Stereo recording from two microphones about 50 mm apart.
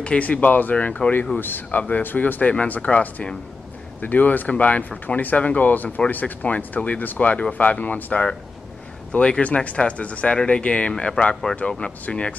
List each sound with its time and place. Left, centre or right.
0.0 s speech: left
1.4 s speech: left